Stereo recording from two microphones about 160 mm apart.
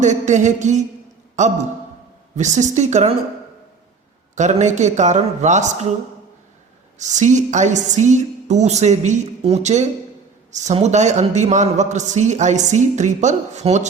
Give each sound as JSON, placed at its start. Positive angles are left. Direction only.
{"t": 0.0, "sound": "a man's voice", "side_deg": -50}
{"t": 4.4, "sound": "a man's voice", "side_deg": -45}
{"t": 7.0, "sound": "a man's voice", "side_deg": -50}